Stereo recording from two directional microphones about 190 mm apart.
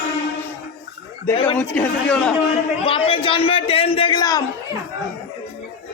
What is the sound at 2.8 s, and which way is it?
A man's voice, 30° left (ahead or behind).